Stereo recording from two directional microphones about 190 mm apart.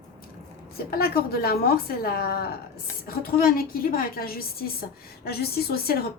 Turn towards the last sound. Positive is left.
turn(degrees=55)  # may be behind; listen again after turning